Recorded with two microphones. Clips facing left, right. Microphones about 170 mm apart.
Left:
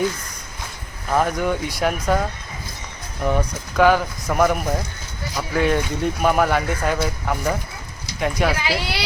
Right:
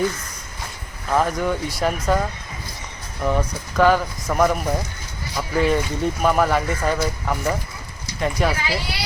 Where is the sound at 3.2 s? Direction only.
5° left (ahead or behind).